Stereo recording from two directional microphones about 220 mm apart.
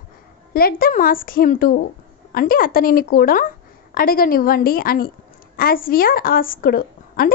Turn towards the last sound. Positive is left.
turn(degrees=40)  # may be behind; listen again after turning